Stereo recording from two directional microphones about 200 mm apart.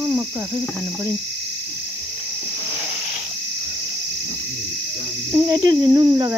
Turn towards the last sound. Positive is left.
turn(degrees=-20)  # may be behind; listen again after turning